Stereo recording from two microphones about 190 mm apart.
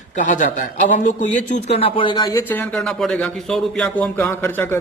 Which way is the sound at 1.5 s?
30° left (ahead or behind).